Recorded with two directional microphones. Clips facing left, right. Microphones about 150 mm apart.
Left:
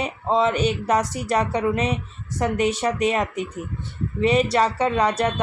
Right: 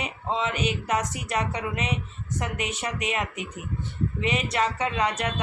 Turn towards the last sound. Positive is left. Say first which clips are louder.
# left 6 dB
turn(degrees=35)  # may be behind; listen again after turning